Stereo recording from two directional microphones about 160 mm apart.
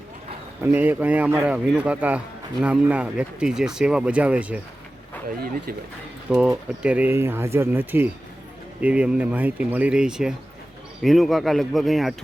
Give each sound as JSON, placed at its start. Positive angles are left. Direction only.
{"t": 0.6, "sound": "speech", "side_deg": -10}
{"t": 6.3, "sound": "speech", "side_deg": -5}